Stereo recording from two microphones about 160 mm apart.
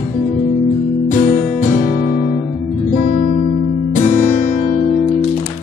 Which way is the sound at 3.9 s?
55° left (ahead or behind).